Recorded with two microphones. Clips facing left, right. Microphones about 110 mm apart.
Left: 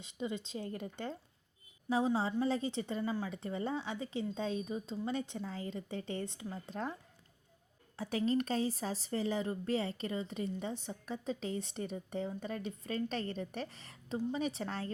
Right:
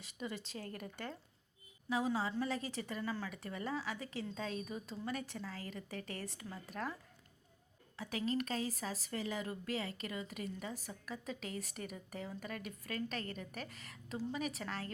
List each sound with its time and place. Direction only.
0.0 s speech: 20° left (ahead or behind)
7.9 s speech: 35° left (ahead or behind)